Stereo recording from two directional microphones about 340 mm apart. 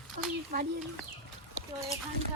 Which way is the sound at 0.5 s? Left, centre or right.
Right.